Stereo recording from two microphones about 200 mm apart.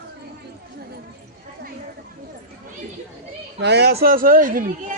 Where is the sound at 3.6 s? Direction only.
55° right (ahead or behind).